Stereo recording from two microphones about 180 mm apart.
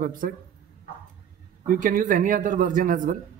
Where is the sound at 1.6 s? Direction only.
50° right (ahead or behind).